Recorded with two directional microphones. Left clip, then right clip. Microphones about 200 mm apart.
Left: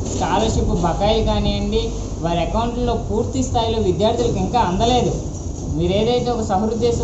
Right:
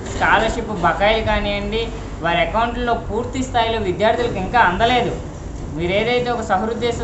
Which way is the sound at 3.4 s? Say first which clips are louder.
Right 3 dB; 5° right (ahead or behind).